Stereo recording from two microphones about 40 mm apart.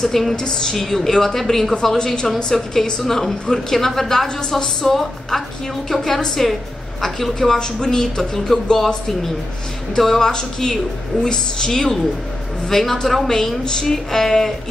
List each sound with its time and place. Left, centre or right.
0.0 s a woman's voice: centre
7.3 s speech: centre